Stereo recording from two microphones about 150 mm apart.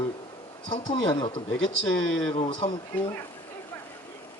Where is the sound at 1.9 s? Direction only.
5° left (ahead or behind).